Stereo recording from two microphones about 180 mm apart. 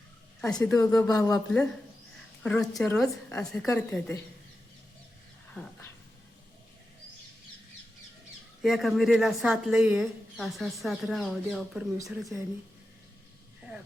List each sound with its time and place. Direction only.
0.5 s speech: 5° left (ahead or behind)
0.8 s a woman's voice: 15° left (ahead or behind)
2.4 s a woman's voice: 5° left (ahead or behind)
8.6 s speech: centre (ahead or behind)